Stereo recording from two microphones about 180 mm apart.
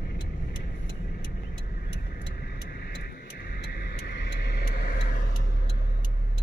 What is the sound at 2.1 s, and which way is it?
Vehicle, 60° left (ahead or behind).